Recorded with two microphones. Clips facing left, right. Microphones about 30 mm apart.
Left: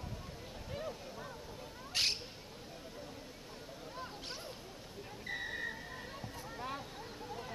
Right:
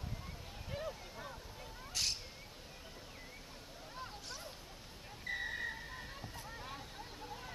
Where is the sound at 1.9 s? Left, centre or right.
Left.